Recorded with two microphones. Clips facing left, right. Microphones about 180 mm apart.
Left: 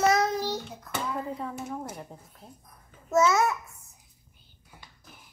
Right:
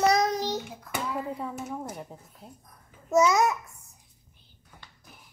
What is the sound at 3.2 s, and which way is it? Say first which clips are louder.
Speech: right 1 dB; 15° right (ahead or behind).